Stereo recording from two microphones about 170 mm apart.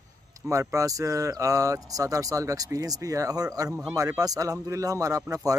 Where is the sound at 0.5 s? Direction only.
20° right (ahead or behind).